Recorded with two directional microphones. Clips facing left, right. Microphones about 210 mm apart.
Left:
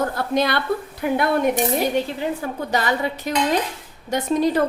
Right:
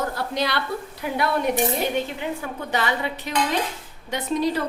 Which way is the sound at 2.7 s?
40° left (ahead or behind).